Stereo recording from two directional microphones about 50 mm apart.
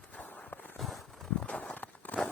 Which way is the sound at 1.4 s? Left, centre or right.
Left.